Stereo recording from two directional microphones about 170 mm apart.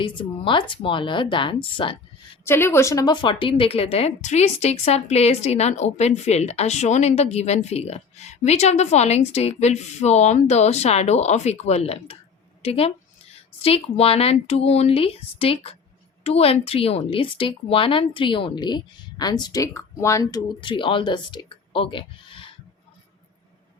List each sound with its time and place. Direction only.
0.0 s speech: 30° left (ahead or behind)
2.4 s speech: 15° left (ahead or behind); by 22.5 s 30° left (ahead or behind)